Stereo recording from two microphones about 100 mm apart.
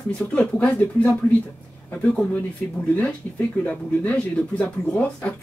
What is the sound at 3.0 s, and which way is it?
Speech, 15° left (ahead or behind).